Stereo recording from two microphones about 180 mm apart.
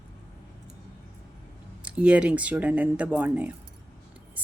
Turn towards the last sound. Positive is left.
turn(degrees=-10)  # may be behind; listen again after turning